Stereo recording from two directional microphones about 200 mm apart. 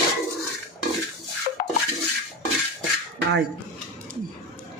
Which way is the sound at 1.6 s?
40° left (ahead or behind).